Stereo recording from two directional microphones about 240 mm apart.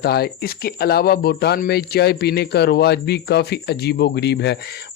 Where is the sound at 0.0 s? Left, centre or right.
Left.